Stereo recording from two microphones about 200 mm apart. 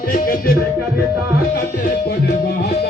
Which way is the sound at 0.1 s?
45° left (ahead or behind).